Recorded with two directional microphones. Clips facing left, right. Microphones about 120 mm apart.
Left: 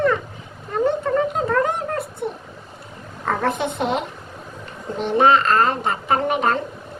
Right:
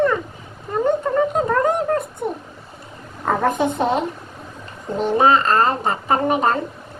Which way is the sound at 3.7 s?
35° right (ahead or behind).